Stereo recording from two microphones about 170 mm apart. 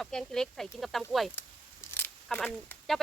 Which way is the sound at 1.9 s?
10° left (ahead or behind).